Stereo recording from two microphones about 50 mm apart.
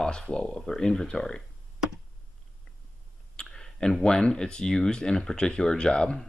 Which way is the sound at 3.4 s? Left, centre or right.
Centre.